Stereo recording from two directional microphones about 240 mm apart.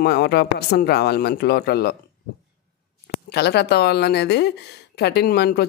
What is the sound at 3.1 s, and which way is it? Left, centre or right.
Speech, left.